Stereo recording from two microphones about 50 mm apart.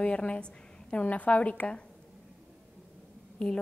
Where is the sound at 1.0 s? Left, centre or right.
Left.